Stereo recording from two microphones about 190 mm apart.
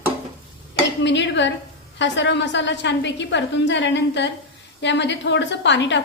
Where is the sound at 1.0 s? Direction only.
70° left (ahead or behind).